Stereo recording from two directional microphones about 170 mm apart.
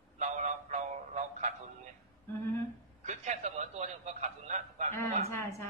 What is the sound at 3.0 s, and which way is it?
A man's voice, 45° right (ahead or behind).